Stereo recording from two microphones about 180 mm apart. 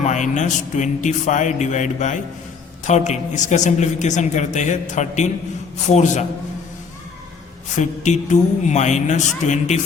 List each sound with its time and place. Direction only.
0.0 s a woman's voice: 40° left (ahead or behind)
7.8 s a woman's voice: 40° left (ahead or behind)